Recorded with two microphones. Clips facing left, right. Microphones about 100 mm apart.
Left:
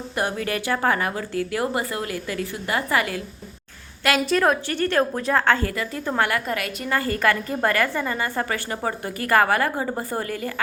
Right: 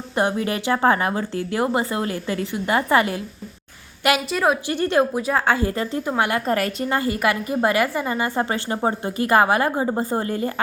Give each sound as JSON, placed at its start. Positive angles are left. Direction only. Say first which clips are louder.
{"t": 0.2, "sound": "a woman's voice", "louder": "right 4 dB", "side_deg": -20}
{"t": 4.3, "sound": "a woman's voice", "louder": "left 4 dB", "side_deg": -5}
{"t": 4.7, "sound": "speech", "louder": "right 2 dB", "side_deg": -15}
{"t": 5.7, "sound": "a woman's voice", "louder": "right 4 dB", "side_deg": -30}
{"t": 6.1, "sound": "a woman's voice", "louder": "even", "side_deg": -20}
{"t": 6.5, "sound": "a woman's voice", "louder": "right 6 dB", "side_deg": -40}
{"t": 6.9, "sound": "a woman's voice", "louder": "left 1 dB", "side_deg": -15}